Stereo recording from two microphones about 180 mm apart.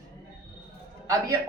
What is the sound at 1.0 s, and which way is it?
Speech, 20° right (ahead or behind).